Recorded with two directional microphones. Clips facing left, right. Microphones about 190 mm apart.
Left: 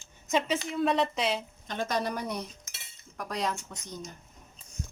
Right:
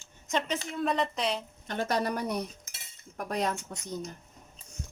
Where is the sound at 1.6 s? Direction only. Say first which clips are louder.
Right 2 dB; 55° right (ahead or behind).